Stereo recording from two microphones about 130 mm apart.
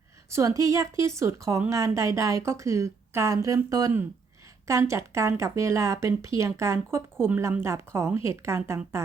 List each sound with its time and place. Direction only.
0.3 s speech: 25° right (ahead or behind)